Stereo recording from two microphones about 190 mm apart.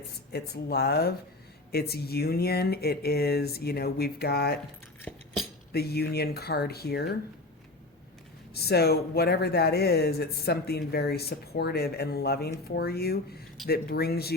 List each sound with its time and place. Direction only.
0.3 s speech: 55° left (ahead or behind)
5.1 s chink: 5° left (ahead or behind)
5.7 s speech: 55° left (ahead or behind)
8.5 s speech: 55° left (ahead or behind)